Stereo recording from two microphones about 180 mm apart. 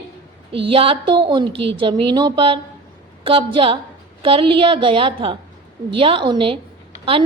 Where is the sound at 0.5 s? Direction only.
30° right (ahead or behind).